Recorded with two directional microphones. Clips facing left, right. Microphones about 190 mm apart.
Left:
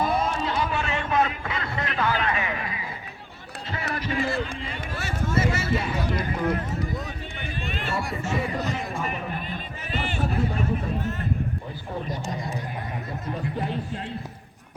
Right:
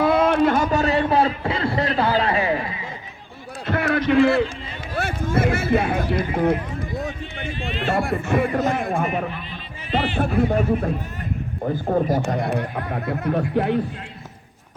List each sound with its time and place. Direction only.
0.0 s a man's voice: 65° right (ahead or behind); by 2.7 s 30° right (ahead or behind)
3.7 s speech: 65° right (ahead or behind)
7.3 s speech: 45° left (ahead or behind)
7.9 s speech: 55° right (ahead or behind)
9.3 s run: 45° left (ahead or behind)
10.2 s speech: 60° right (ahead or behind)